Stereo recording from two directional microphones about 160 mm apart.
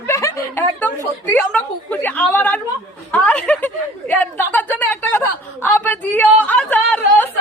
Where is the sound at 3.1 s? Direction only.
10° left (ahead or behind).